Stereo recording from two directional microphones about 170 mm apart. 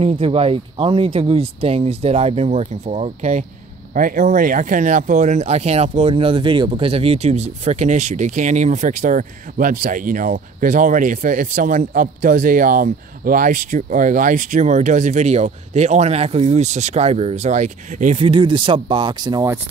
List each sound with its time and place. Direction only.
0.0 s speech: 35° right (ahead or behind)
3.9 s speech: 55° right (ahead or behind); by 19.5 s 25° right (ahead or behind)